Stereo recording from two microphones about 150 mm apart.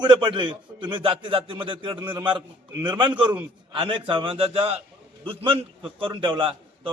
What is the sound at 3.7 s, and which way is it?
A man's voice, 35° right (ahead or behind).